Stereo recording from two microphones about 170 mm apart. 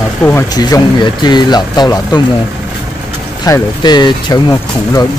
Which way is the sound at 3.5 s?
25° left (ahead or behind).